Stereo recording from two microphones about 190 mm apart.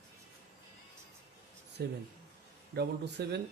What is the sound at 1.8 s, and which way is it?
Speech, 60° right (ahead or behind).